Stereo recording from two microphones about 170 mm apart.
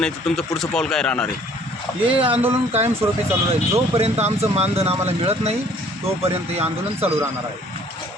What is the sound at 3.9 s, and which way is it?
Speech, 40° right (ahead or behind).